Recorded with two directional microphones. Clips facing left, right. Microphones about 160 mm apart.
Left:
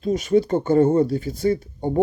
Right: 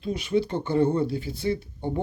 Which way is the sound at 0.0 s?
45° left (ahead or behind).